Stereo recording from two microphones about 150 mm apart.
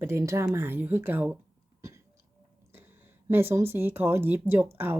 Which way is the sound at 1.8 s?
20° right (ahead or behind).